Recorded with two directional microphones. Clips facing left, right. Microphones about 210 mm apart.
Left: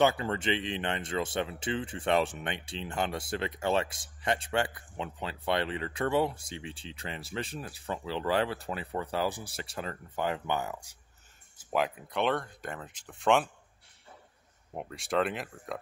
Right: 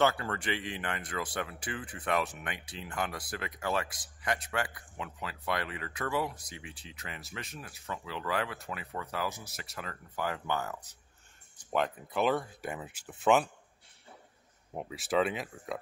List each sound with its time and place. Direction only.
0.0 s speech: 20° left (ahead or behind); by 13.5 s 5° right (ahead or behind)
14.7 s speech: centre (ahead or behind)